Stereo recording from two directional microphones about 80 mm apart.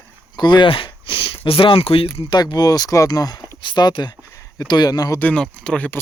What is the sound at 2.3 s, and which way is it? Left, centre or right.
Speech, left.